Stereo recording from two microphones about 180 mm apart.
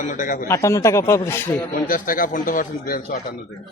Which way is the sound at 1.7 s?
50° left (ahead or behind).